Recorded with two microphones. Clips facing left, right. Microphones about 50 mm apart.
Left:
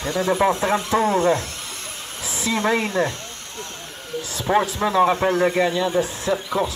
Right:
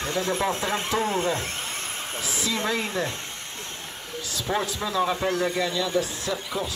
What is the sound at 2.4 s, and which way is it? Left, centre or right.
Speech, left.